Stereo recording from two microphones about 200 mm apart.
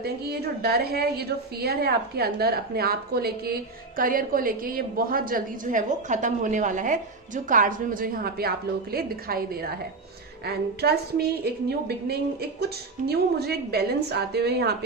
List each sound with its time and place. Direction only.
0.0 s a woman's voice: 50° right (ahead or behind)